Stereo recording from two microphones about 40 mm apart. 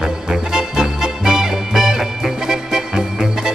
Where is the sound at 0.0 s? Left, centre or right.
Centre.